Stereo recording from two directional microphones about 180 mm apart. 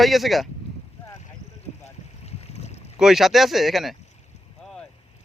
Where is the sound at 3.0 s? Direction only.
Centre (ahead or behind).